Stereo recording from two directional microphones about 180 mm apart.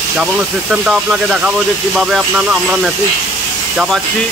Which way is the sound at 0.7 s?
5° right (ahead or behind).